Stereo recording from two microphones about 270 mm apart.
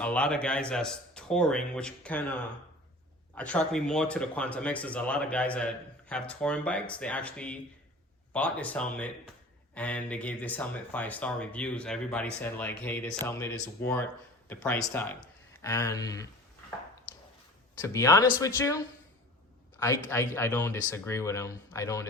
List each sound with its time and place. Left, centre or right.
0.0 s speech: centre
17.7 s speech: centre
20.1 s speech: centre